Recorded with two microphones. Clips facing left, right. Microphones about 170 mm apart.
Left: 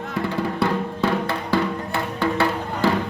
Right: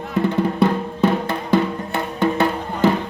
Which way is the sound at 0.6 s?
20° right (ahead or behind).